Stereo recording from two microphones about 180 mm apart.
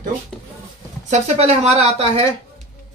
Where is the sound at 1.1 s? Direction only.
35° right (ahead or behind).